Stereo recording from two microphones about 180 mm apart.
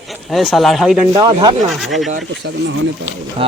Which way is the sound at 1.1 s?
25° right (ahead or behind).